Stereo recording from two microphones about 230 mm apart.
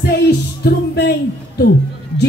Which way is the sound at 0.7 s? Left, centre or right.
Left.